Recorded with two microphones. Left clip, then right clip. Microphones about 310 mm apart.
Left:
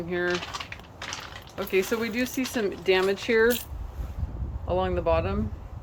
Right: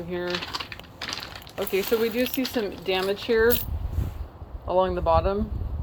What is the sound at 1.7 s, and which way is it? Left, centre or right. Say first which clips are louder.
Speech: right 2 dB; centre.